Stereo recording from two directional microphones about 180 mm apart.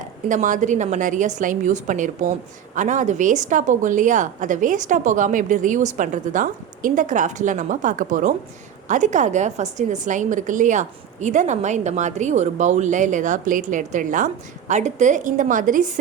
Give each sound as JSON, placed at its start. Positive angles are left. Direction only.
{"t": 0.3, "sound": "a woman's voice", "side_deg": -45}